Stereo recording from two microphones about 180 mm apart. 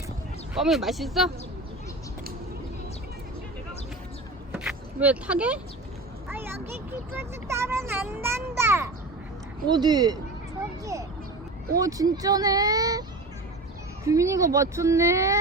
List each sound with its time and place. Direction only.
0.5 s speech: centre (ahead or behind)
4.5 s a sound: 10° right (ahead or behind)
9.6 s speech: 25° right (ahead or behind)
11.8 s speech: 20° right (ahead or behind)